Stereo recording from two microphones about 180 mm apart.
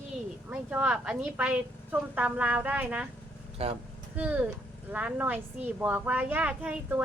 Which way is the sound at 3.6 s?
35° right (ahead or behind).